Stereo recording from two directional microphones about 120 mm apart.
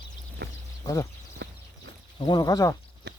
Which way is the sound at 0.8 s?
25° left (ahead or behind).